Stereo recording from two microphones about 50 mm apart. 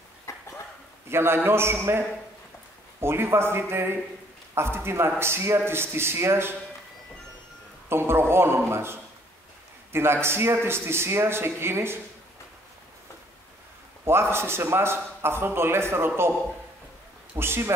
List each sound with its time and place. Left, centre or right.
0.3 s a sound: left
1.0 s a man's voice: right
7.9 s a man's voice: right
14.0 s a man's voice: right
17.4 s a man's voice: right